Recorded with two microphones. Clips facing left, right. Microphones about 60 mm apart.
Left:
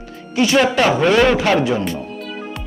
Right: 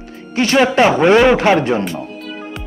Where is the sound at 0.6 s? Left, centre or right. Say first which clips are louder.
Right 4 dB; right.